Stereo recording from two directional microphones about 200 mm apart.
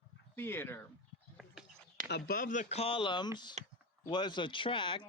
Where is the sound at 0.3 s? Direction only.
10° left (ahead or behind).